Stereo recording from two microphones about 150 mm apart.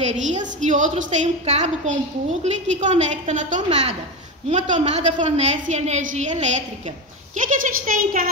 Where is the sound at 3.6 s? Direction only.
45° right (ahead or behind).